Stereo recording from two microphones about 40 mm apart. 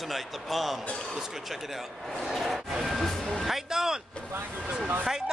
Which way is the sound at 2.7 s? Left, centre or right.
Centre.